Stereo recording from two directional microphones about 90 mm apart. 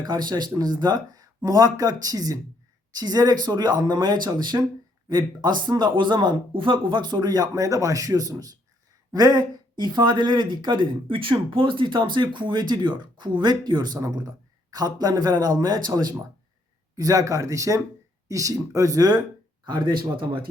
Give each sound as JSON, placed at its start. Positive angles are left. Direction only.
{"t": 0.0, "sound": "speech", "side_deg": -50}
{"t": 19.6, "sound": "speech", "side_deg": -55}